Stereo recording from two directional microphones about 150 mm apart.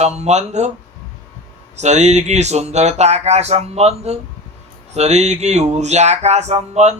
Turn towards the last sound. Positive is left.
turn(degrees=-45)  # may be behind; listen again after turning